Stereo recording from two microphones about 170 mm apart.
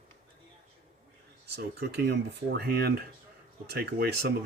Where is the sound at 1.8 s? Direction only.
75° right (ahead or behind).